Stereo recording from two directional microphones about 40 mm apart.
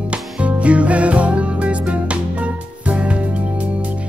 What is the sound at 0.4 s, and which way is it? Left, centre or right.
Music, right.